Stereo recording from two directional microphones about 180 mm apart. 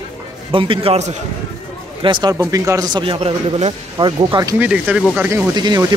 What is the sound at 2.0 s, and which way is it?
A man's voice, 25° right (ahead or behind).